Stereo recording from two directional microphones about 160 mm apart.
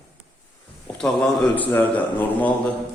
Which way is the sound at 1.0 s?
5° left (ahead or behind).